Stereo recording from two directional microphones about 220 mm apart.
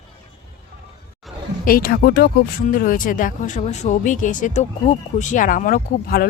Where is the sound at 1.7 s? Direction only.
40° left (ahead or behind).